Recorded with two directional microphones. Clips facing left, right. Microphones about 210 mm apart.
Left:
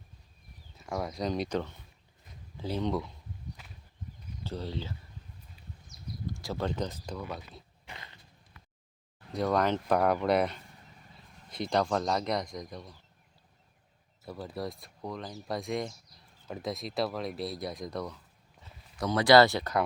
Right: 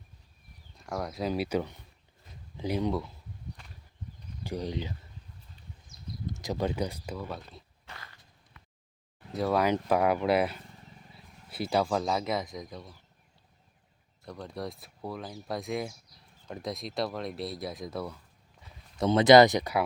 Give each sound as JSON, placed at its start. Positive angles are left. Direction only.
{"t": 0.8, "sound": "speech", "side_deg": 0}
{"t": 4.4, "sound": "speech", "side_deg": -15}
{"t": 5.9, "sound": "a sound", "side_deg": -55}
{"t": 6.2, "sound": "speech", "side_deg": -20}
{"t": 7.9, "sound": "dog", "side_deg": 20}
{"t": 9.3, "sound": "speech", "side_deg": -5}
{"t": 14.3, "sound": "speech", "side_deg": 5}
{"t": 18.9, "sound": "speech", "side_deg": -25}